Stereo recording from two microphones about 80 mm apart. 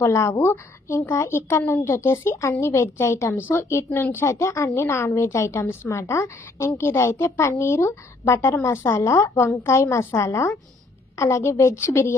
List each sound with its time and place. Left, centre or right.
0.0 s a woman's voice: left